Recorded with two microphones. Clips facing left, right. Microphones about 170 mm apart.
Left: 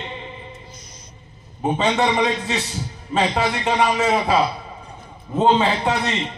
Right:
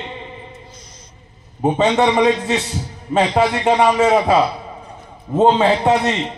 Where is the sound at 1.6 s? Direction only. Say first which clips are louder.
Right 4 dB; 50° right (ahead or behind).